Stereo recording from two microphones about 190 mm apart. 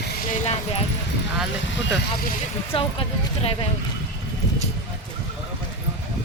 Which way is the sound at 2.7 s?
30° left (ahead or behind).